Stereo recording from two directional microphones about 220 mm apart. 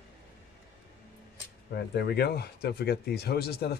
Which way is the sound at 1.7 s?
45° left (ahead or behind).